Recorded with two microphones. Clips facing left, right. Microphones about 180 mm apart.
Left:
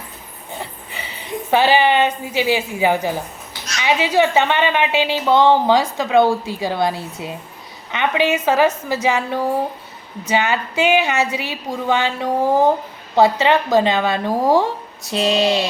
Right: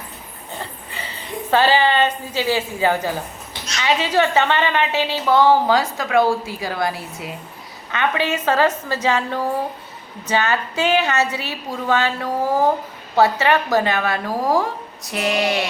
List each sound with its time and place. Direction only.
0.6 s a woman's voice: 15° left (ahead or behind)